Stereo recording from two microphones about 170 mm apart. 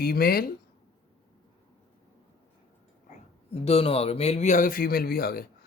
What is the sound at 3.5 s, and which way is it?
Speech, 35° left (ahead or behind).